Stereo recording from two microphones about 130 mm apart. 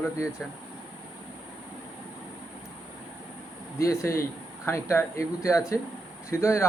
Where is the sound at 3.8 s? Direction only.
25° left (ahead or behind).